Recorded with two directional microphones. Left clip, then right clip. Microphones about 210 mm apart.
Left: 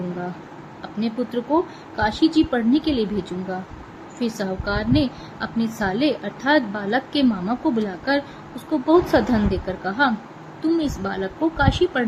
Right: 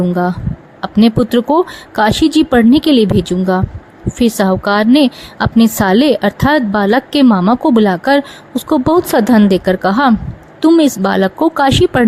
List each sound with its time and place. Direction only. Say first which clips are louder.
0.8 s a woman's voice: right 14 dB; 50° right (ahead or behind)